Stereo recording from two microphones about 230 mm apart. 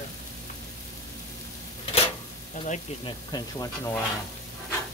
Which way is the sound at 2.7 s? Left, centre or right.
Centre.